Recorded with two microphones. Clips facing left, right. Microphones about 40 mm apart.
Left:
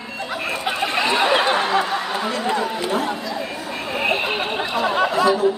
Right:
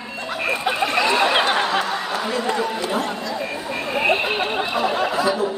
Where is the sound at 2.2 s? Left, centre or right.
Centre.